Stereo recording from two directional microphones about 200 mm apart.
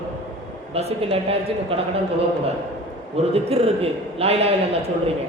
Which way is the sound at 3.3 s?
30° right (ahead or behind).